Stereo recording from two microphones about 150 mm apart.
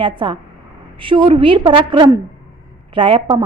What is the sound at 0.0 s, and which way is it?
A woman's voice, 35° right (ahead or behind).